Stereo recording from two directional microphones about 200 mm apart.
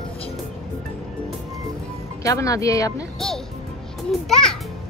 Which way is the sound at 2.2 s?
15° left (ahead or behind).